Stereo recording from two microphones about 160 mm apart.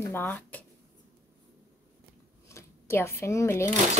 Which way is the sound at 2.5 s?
15° left (ahead or behind).